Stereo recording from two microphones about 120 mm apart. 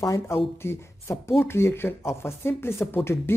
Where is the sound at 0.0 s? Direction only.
25° left (ahead or behind).